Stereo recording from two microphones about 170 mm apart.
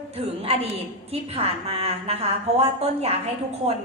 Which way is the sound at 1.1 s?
35° right (ahead or behind).